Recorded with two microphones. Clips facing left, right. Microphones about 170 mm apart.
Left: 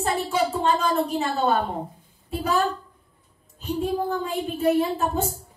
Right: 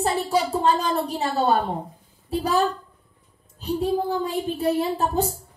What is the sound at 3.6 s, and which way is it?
A woman's voice, 35° right (ahead or behind).